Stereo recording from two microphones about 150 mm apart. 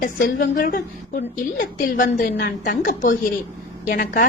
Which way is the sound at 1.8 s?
65° left (ahead or behind).